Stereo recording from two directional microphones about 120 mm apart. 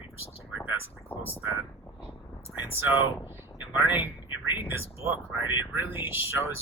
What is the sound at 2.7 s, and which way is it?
Speech, 20° right (ahead or behind).